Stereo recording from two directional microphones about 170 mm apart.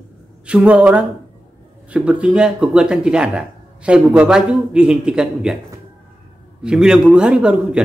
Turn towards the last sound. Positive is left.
turn(degrees=-5)  # may be behind; listen again after turning